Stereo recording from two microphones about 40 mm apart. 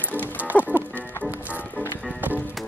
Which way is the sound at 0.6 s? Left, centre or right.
Right.